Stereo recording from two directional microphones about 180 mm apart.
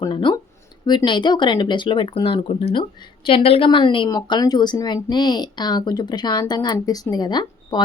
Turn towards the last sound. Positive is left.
turn(degrees=25)  # may be behind; listen again after turning